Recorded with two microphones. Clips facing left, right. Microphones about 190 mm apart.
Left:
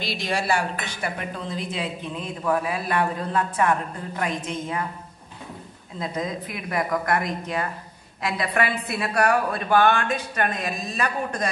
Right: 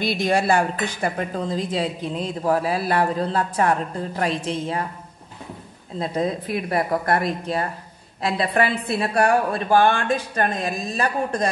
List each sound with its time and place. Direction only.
0.0 s a woman's voice: 55° right (ahead or behind)
1.1 s speech: 35° right (ahead or behind)
5.9 s speech: 30° right (ahead or behind)